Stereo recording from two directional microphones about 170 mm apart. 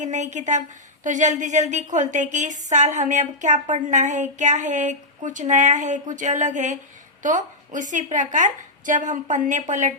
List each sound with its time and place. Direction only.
0.0 s a woman's voice: 45° right (ahead or behind)